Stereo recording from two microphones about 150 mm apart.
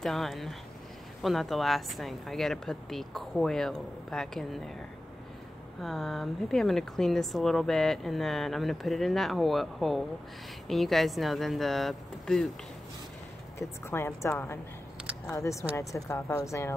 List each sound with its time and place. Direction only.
0.0 s speech: centre (ahead or behind)
5.8 s speech: centre (ahead or behind)
13.6 s a woman's voice: 15° left (ahead or behind)